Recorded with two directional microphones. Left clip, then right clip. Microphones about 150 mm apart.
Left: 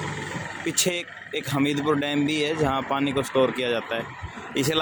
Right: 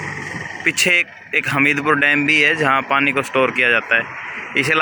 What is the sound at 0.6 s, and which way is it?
Speech, 10° left (ahead or behind).